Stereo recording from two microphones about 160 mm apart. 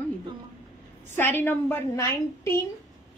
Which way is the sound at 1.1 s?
15° left (ahead or behind).